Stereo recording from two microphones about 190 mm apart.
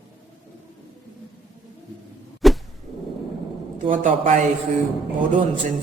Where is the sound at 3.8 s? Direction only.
45° right (ahead or behind).